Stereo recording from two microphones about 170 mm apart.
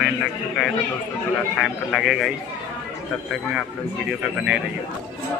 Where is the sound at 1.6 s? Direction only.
Centre (ahead or behind).